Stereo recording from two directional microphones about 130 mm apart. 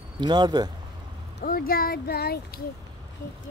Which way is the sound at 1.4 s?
90° left.